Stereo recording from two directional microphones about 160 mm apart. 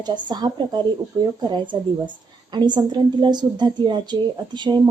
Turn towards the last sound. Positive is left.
turn(degrees=-30)  # may be behind; listen again after turning